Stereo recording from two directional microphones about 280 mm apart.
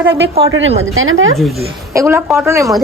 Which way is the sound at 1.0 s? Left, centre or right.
Right.